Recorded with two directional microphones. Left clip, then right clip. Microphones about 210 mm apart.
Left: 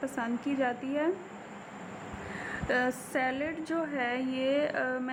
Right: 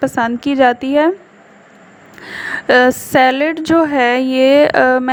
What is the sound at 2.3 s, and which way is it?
A woman's voice, 45° right (ahead or behind).